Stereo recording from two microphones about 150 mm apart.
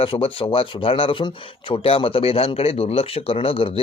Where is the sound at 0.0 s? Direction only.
40° left (ahead or behind).